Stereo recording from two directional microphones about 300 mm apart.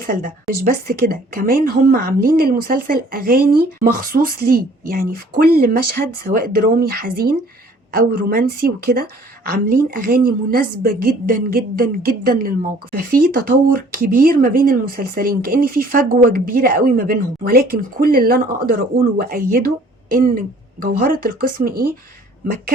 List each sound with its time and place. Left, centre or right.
0.0 s speech: right